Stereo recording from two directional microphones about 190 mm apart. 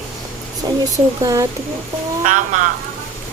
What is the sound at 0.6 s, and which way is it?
Speech, 25° right (ahead or behind).